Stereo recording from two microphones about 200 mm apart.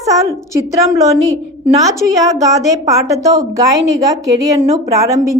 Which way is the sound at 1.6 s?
15° right (ahead or behind).